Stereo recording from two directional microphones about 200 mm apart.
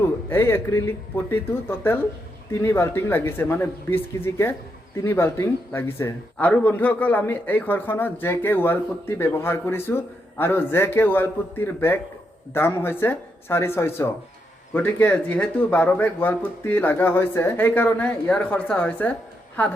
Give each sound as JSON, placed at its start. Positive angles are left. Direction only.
{"t": 0.3, "sound": "speech", "side_deg": 10}